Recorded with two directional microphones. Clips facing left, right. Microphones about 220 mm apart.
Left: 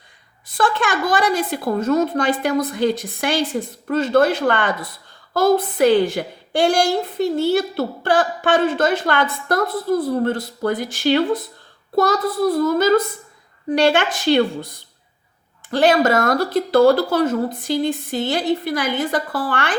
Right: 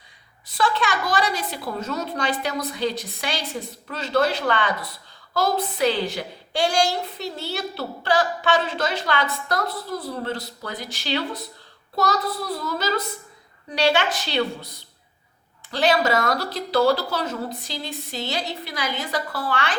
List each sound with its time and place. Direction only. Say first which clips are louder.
0.4 s a woman's voice: left 3 dB; 50° left (ahead or behind)